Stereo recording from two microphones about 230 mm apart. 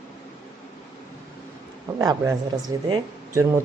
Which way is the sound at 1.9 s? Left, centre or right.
Centre.